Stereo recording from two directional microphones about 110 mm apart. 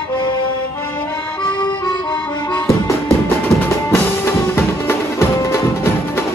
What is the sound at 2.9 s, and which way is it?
Music, 25° left (ahead or behind).